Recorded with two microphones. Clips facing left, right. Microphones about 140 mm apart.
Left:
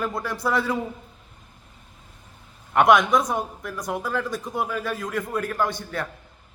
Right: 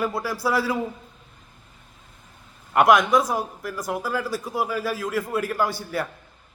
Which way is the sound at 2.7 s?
Centre (ahead or behind).